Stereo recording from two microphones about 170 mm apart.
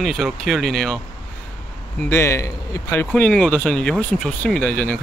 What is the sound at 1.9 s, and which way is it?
Speech, 15° left (ahead or behind).